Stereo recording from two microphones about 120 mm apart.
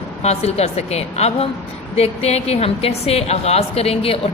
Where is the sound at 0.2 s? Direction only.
65° left (ahead or behind).